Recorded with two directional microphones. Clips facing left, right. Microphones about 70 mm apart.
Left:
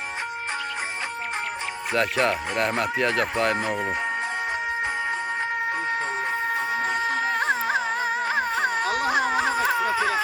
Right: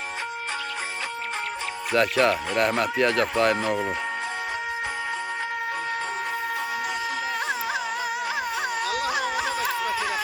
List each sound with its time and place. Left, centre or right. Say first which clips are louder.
2.0 s speech: right 2 dB; centre
6.5 s music: left 3 dB; left